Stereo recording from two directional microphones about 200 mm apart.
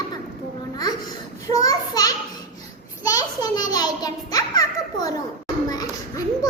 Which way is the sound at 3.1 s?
20° left (ahead or behind).